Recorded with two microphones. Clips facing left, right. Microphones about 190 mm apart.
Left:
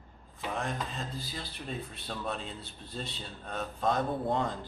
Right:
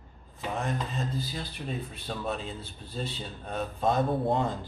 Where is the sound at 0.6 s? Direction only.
Centre (ahead or behind).